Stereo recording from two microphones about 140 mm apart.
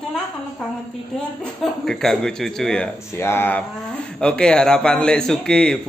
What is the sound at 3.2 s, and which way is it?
A man's voice, 15° left (ahead or behind).